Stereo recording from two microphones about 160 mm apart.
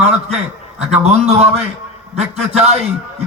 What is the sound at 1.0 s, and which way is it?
Speech, 40° right (ahead or behind).